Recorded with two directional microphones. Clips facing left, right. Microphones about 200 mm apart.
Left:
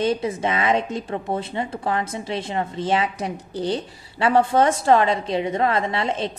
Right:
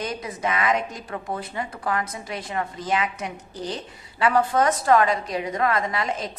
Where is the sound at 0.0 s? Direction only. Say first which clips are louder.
Left 7 dB; 25° left (ahead or behind).